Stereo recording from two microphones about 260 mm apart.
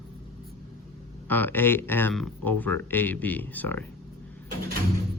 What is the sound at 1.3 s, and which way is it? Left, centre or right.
Speech, centre.